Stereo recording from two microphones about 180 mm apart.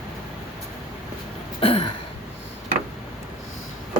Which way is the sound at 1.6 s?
30° left (ahead or behind).